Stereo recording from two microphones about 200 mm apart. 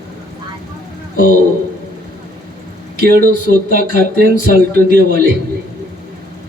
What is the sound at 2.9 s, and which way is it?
Speech, 50° right (ahead or behind).